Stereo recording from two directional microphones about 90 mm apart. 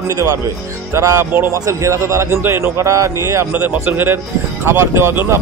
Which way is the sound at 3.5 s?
20° right (ahead or behind).